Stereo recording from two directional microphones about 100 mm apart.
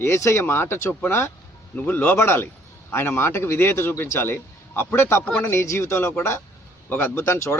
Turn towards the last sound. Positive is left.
turn(degrees=30)  # may be behind; listen again after turning